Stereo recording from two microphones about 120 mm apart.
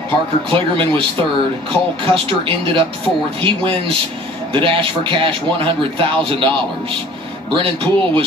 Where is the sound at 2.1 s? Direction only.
50° right (ahead or behind).